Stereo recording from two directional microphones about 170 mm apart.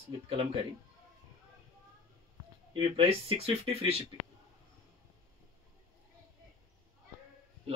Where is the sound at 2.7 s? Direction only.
35° right (ahead or behind).